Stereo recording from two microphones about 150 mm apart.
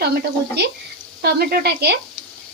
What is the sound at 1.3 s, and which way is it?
Speech, 90° right.